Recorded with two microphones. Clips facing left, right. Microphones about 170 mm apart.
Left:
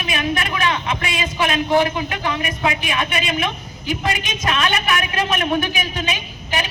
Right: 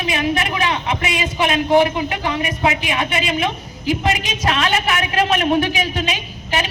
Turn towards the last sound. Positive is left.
turn(degrees=-30)  # may be behind; listen again after turning